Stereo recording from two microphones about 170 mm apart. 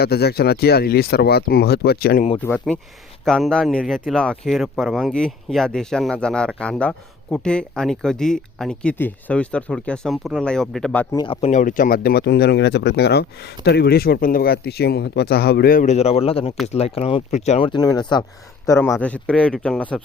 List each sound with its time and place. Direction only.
0.0 s speech: 70° left (ahead or behind)
2.4 s speech: 10° left (ahead or behind)
11.1 s speech: 25° left (ahead or behind)
11.3 s speech: 40° left (ahead or behind)
17.7 s speech: 25° left (ahead or behind); by 20.0 s 5° left (ahead or behind)